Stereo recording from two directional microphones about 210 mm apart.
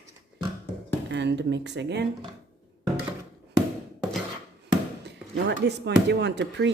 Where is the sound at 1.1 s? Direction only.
55° right (ahead or behind).